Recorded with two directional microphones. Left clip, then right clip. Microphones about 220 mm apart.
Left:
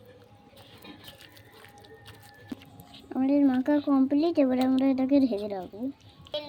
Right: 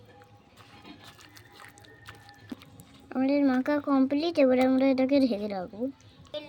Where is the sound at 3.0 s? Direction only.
40° right (ahead or behind).